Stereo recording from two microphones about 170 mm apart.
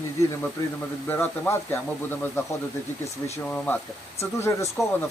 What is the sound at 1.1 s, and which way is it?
Speech, 10° left (ahead or behind).